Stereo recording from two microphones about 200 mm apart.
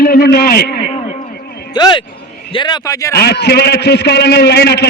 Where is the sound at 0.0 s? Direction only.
50° left (ahead or behind).